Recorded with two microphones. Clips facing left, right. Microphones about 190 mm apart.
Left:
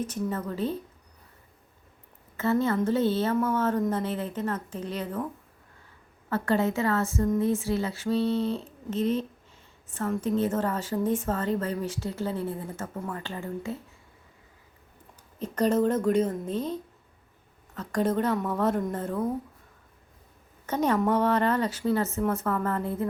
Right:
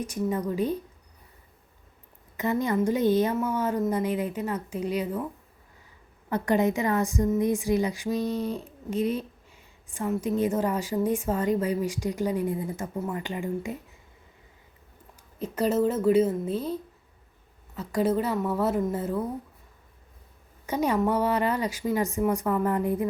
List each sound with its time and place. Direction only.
0.0 s a woman's voice: 15° right (ahead or behind)
2.3 s a woman's voice: 15° right (ahead or behind)
6.3 s a woman's voice: 15° right (ahead or behind)
15.4 s a woman's voice: 10° right (ahead or behind)
20.7 s a woman's voice: 10° right (ahead or behind)